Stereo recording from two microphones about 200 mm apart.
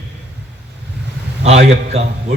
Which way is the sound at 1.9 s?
30° right (ahead or behind).